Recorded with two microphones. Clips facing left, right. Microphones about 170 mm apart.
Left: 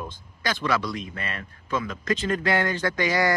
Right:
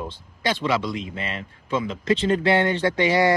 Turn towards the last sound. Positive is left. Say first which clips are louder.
# right 4 dB
turn(degrees=-25)  # may be behind; listen again after turning